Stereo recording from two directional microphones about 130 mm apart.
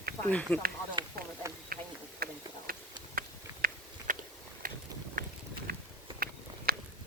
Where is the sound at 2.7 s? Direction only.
90° right.